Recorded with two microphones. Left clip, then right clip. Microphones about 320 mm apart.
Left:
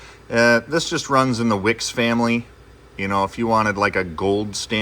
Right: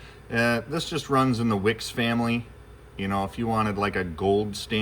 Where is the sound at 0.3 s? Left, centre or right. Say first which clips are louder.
Left 9 dB; centre.